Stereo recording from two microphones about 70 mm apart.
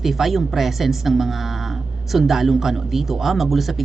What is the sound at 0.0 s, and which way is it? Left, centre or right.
A woman's voice, centre.